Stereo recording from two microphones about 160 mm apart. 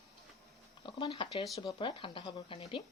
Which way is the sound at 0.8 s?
30° left (ahead or behind).